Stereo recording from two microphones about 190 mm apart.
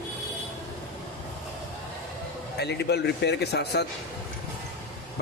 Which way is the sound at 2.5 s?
60° left (ahead or behind).